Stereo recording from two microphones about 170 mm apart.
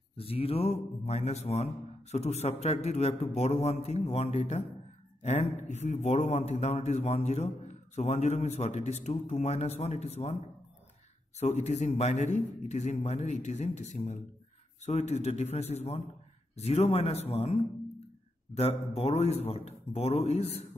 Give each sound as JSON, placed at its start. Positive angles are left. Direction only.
{"t": 0.2, "sound": "a man's voice", "side_deg": 35}
{"t": 11.3, "sound": "a man's voice", "side_deg": 40}